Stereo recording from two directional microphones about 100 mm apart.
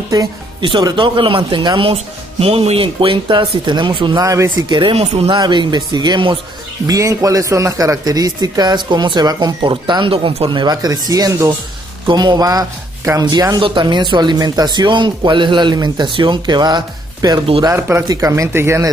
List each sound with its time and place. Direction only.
0.6 s speech: 55° right (ahead or behind)
1.8 s speech: 75° right (ahead or behind); by 4.2 s 55° right (ahead or behind)
4.2 s speech: 35° right (ahead or behind)
4.6 s speech: 50° right (ahead or behind)
4.9 s speech: 85° right
5.4 s speech: 50° right (ahead or behind)
6.9 s speech: 30° right (ahead or behind)
13.6 s speech: 55° right (ahead or behind)
17.6 s speech: 25° right (ahead or behind)
18.0 s speech: 35° right (ahead or behind)